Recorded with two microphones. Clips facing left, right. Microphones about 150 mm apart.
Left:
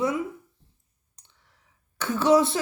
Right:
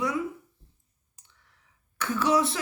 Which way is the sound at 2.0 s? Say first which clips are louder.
Left 5 dB; 25° left (ahead or behind).